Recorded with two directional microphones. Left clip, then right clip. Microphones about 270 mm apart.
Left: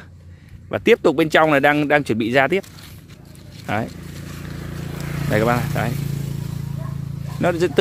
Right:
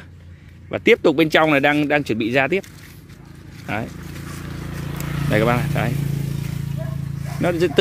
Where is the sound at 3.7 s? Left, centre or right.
Centre.